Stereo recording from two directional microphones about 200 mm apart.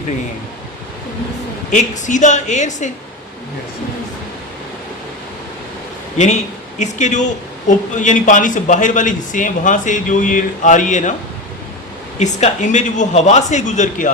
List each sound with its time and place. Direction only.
1.7 s a man's voice: 40° left (ahead or behind)
6.1 s a man's voice: 35° left (ahead or behind)
12.2 s a man's voice: 35° left (ahead or behind)